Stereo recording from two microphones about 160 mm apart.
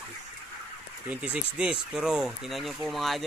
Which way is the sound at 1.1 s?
10° right (ahead or behind).